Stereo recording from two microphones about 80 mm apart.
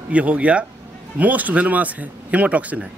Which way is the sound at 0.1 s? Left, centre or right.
Centre.